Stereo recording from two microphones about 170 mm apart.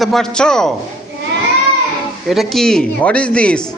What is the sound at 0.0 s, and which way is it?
Speech, centre (ahead or behind).